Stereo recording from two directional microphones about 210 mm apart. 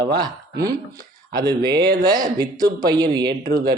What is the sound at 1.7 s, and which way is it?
Speech, 50° right (ahead or behind).